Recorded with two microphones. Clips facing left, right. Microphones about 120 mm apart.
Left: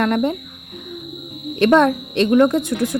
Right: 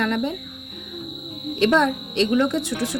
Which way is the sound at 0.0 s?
50° left (ahead or behind).